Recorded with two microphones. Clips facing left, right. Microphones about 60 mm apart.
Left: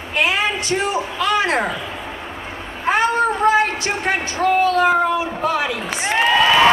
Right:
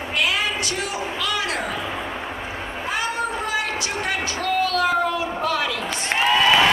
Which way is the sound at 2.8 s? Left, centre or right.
Left.